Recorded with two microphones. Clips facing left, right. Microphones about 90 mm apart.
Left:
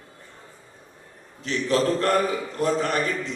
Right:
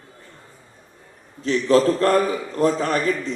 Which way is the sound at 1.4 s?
35° right (ahead or behind).